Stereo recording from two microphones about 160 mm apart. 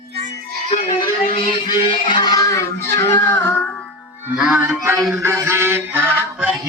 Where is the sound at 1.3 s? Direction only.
30° left (ahead or behind).